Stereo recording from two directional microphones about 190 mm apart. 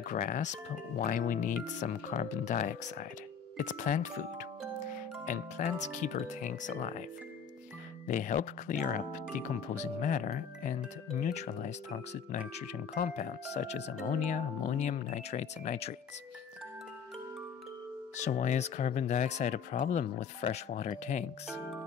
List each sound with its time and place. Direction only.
0.1 s speech: 45° left (ahead or behind)
8.1 s speech: 45° left (ahead or behind)
18.1 s speech: 40° left (ahead or behind)